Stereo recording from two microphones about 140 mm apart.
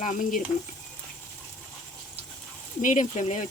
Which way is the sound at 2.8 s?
65° left (ahead or behind).